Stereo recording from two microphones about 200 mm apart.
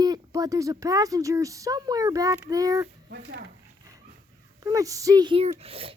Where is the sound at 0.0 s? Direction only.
20° right (ahead or behind).